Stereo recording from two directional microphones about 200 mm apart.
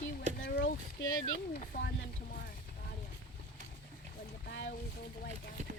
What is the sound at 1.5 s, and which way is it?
Speech, 55° left (ahead or behind).